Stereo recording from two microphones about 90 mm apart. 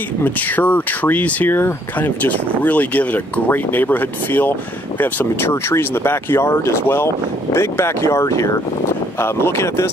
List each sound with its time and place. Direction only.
0.2 s speech: 20° left (ahead or behind)